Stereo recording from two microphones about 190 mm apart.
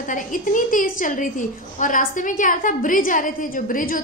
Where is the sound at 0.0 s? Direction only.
45° left (ahead or behind).